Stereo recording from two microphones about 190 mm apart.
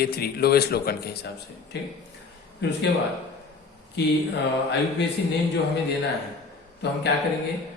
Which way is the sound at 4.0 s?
60° left (ahead or behind).